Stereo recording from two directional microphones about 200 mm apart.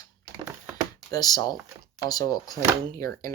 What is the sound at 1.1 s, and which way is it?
Speech, 20° left (ahead or behind).